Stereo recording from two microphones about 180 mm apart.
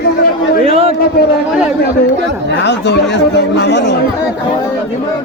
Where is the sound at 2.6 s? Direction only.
75° left (ahead or behind).